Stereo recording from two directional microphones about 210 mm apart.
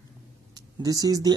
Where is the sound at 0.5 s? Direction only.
15° right (ahead or behind).